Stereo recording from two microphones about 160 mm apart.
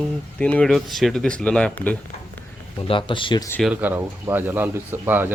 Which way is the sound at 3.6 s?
10° right (ahead or behind).